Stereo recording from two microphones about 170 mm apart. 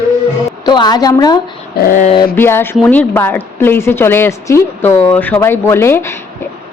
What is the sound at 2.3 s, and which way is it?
A woman's voice, 15° left (ahead or behind).